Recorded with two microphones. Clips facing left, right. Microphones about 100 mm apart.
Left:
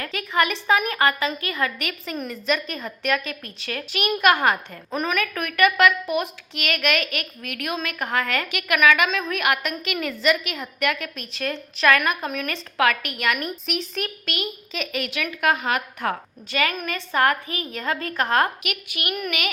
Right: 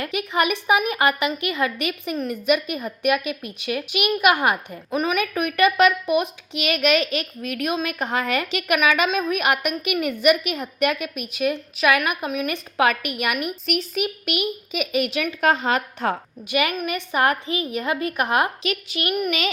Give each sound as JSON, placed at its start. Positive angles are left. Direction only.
{"t": 0.0, "sound": "a woman's voice", "side_deg": -20}
{"t": 5.1, "sound": "a woman's voice", "side_deg": -15}
{"t": 12.5, "sound": "a woman's voice", "side_deg": -20}
{"t": 13.7, "sound": "a child's voice", "side_deg": -5}
{"t": 14.3, "sound": "a woman's voice", "side_deg": -15}
{"t": 18.6, "sound": "speech", "side_deg": -30}